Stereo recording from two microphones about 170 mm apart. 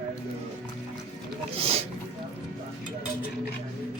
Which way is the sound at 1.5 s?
35° right (ahead or behind).